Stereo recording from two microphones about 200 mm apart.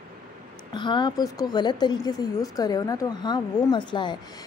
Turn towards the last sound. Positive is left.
turn(degrees=25)  # may be behind; listen again after turning